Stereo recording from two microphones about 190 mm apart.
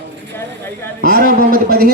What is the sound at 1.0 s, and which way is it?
Speech, 50° right (ahead or behind).